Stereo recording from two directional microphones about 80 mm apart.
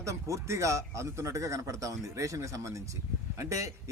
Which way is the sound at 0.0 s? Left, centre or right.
Right.